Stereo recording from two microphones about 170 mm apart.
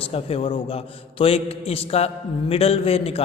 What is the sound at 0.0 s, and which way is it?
A man's voice, 35° left (ahead or behind).